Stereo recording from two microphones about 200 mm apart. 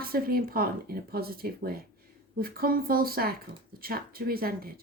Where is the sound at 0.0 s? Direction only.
50° right (ahead or behind).